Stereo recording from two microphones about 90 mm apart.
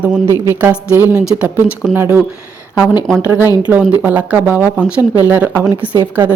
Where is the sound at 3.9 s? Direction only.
20° right (ahead or behind).